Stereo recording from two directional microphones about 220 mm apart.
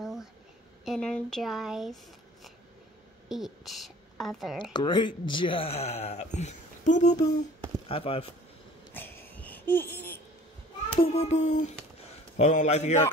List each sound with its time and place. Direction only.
0.0 s a sound: centre (ahead or behind)
0.8 s speech: 5° left (ahead or behind)
3.3 s a woman's voice: centre (ahead or behind)
4.7 s speech: 20° left (ahead or behind)
8.9 s a sound: 10° left (ahead or behind)
11.0 s child singing: 30° left (ahead or behind)